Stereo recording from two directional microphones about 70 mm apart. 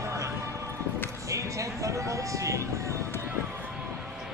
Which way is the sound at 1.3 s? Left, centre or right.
Right.